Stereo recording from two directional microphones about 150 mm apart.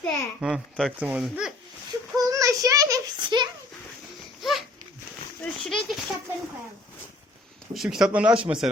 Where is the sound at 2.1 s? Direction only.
20° right (ahead or behind).